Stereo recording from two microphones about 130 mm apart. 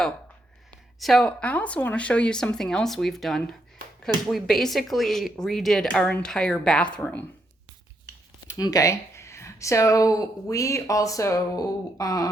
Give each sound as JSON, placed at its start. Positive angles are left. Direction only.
{"t": 0.9, "sound": "speech", "side_deg": 0}
{"t": 8.5, "sound": "speech", "side_deg": 30}